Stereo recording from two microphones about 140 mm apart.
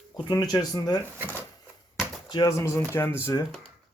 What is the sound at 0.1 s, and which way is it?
Speech, 30° left (ahead or behind).